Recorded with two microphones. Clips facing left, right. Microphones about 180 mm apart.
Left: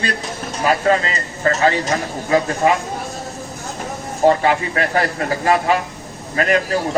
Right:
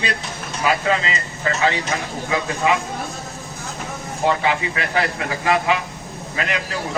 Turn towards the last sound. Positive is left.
turn(degrees=45)  # may be behind; listen again after turning